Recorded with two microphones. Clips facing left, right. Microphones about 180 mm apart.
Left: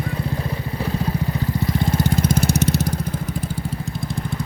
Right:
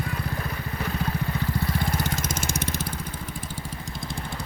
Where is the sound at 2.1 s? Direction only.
30° left (ahead or behind).